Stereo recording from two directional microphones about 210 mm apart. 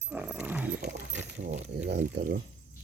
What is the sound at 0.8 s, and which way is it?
Horse, 55° right (ahead or behind).